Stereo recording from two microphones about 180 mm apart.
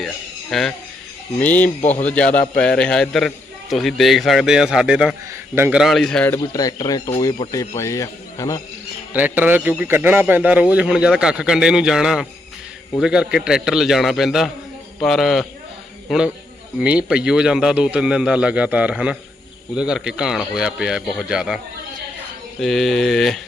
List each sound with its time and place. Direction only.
0.5 s a man's voice: centre (ahead or behind)
1.8 s speech: 40° left (ahead or behind)
2.0 s a man's voice: 5° left (ahead or behind); by 5.8 s 10° right (ahead or behind)
5.8 s a man's voice: centre (ahead or behind)
6.3 s a man's voice: 20° left (ahead or behind)
9.1 s a man's voice: 10° right (ahead or behind)
22.6 s a man's voice: centre (ahead or behind)